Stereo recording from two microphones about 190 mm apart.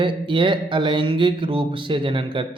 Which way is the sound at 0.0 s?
25° right (ahead or behind).